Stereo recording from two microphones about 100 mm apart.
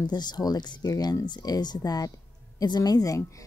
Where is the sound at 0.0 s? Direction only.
45° left (ahead or behind).